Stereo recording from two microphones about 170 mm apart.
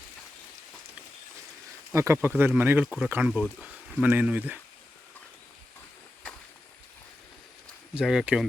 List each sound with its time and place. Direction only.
1.9 s speech: 15° right (ahead or behind)
7.9 s speech: 5° right (ahead or behind)